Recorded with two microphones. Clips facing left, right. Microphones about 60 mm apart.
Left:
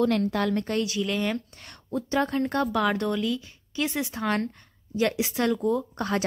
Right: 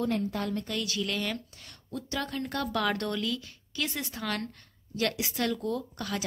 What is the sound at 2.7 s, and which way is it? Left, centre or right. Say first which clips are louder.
Speech: left 5 dB; centre.